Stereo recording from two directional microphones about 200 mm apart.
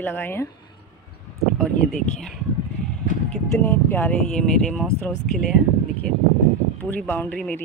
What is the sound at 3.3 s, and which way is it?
Speech, 10° left (ahead or behind).